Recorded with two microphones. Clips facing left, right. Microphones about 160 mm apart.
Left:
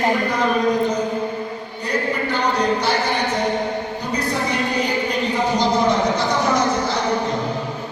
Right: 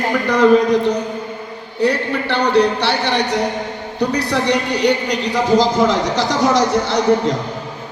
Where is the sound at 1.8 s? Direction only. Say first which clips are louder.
Right 6 dB; 75° right (ahead or behind); by 7.0 s 90° right.